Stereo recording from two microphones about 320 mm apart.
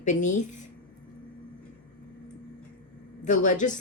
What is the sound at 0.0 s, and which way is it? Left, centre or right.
Speech, left.